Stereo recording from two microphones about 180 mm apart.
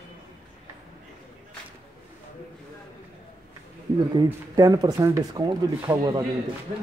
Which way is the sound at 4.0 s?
25° right (ahead or behind).